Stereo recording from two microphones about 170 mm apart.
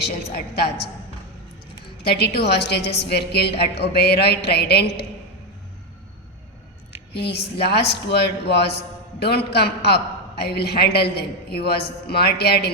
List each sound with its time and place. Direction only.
0.0 s a man's voice: 70° left (ahead or behind)
2.0 s a man's voice: 70° left (ahead or behind)
7.3 s a man's voice: 75° left (ahead or behind)